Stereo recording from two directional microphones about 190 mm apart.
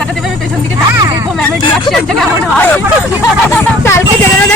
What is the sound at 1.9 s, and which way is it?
Speech, centre (ahead or behind).